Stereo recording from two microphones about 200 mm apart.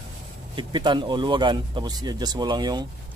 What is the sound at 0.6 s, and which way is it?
Speech, 20° right (ahead or behind).